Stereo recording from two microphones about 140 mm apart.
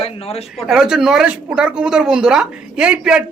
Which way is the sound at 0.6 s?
5° right (ahead or behind).